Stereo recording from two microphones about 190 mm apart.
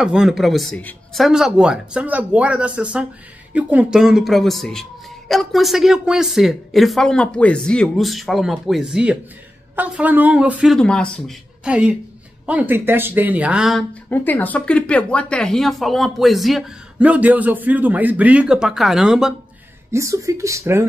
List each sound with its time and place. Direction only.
0.0 s speech: 5° right (ahead or behind)
19.9 s speech: 15° right (ahead or behind)